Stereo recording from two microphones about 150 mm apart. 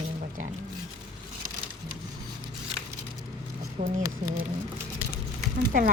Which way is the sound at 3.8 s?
60° right (ahead or behind).